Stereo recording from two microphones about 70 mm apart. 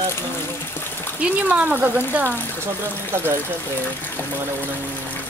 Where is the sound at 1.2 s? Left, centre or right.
Right.